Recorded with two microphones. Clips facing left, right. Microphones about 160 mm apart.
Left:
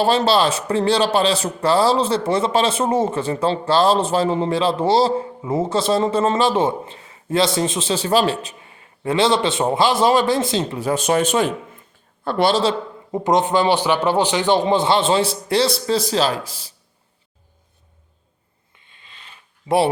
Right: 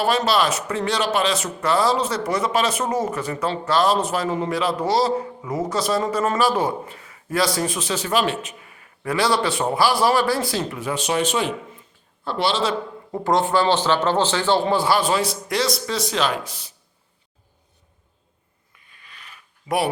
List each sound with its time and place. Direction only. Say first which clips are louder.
0.0 s a man's voice: left 3 dB; 30° left (ahead or behind)
10.8 s speech: left 5 dB; 45° left (ahead or behind)
13.1 s a man's voice: left 3 dB; 20° left (ahead or behind); by 16.4 s 35° left (ahead or behind)
18.7 s a sound: even; 25° left (ahead or behind)